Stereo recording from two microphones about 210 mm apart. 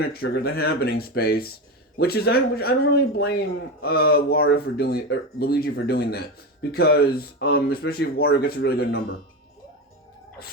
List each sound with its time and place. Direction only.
0.1 s speech: 45° left (ahead or behind)